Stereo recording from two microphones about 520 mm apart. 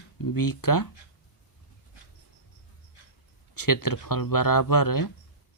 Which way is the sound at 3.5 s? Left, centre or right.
Left.